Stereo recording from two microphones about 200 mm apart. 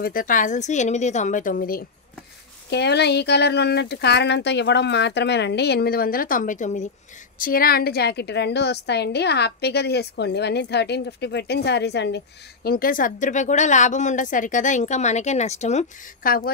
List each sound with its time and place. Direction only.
0.0 s a woman's voice: 45° left (ahead or behind)
2.7 s a woman's voice: 55° left (ahead or behind)
12.6 s a woman's voice: 45° left (ahead or behind)